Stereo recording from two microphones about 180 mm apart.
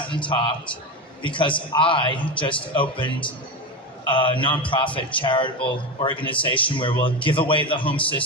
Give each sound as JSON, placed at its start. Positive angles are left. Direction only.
{"t": 0.1, "sound": "a man's voice", "side_deg": 25}